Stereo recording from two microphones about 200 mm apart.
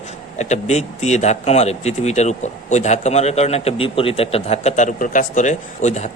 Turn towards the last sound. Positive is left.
turn(degrees=35)  # may be behind; listen again after turning